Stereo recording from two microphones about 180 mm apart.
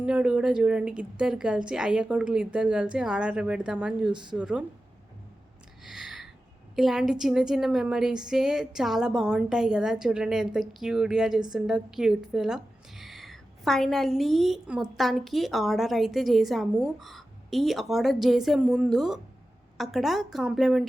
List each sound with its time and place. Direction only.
0.0 s a woman's voice: 5° right (ahead or behind)
4.1 s speech: 25° right (ahead or behind)
4.4 s speech: 5° right (ahead or behind)
5.8 s a sound: centre (ahead or behind)
6.7 s a woman's voice: centre (ahead or behind)